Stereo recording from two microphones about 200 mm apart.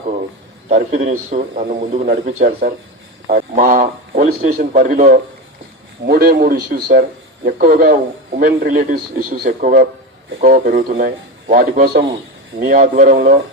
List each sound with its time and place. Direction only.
0.7 s a man's voice: 40° right (ahead or behind)